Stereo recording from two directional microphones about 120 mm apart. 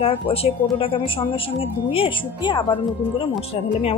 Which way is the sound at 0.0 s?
55° left (ahead or behind).